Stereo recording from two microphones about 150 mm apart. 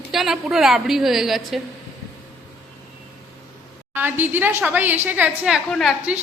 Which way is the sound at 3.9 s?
15° right (ahead or behind).